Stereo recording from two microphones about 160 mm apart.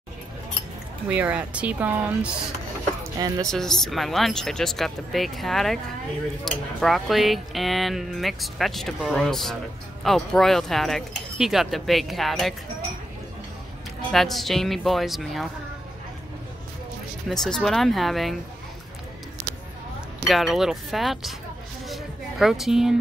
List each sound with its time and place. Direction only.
1.0 s speech: 10° right (ahead or behind)
3.2 s speech: 25° right (ahead or behind)
3.4 s speech: 5° left (ahead or behind)
14.1 s speech: centre (ahead or behind)
17.3 s speech: 5° left (ahead or behind)
20.2 s speech: centre (ahead or behind)
21.8 s a sound: centre (ahead or behind)